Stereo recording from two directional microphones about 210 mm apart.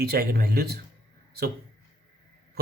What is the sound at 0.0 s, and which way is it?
Speech, 50° right (ahead or behind).